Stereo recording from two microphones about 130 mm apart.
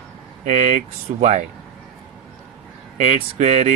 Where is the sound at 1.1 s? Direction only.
65° right (ahead or behind).